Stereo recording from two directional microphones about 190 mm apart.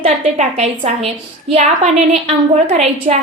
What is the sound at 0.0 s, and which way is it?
A woman's voice, 35° right (ahead or behind).